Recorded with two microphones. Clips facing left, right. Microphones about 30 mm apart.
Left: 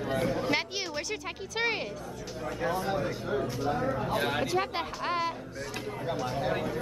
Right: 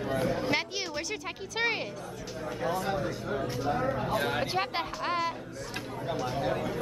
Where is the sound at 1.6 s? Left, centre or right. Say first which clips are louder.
Even; centre.